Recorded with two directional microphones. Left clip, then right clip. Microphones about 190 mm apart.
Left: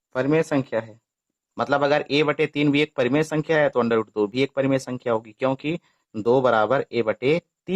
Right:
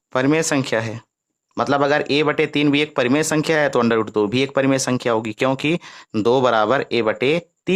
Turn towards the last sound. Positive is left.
turn(degrees=-35)  # may be behind; listen again after turning